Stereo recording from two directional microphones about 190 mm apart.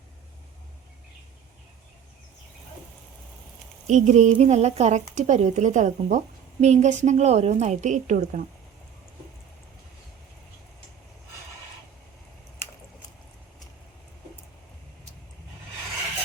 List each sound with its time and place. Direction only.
3.8 s speech: 40° right (ahead or behind)